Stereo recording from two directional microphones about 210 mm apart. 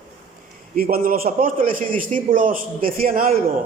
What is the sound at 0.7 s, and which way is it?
A man's voice, 45° right (ahead or behind).